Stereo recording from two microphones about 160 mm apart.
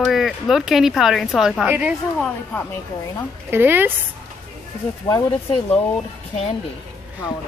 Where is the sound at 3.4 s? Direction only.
15° right (ahead or behind).